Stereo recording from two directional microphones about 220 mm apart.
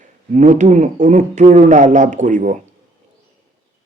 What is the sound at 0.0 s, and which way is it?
A man's voice, 35° right (ahead or behind).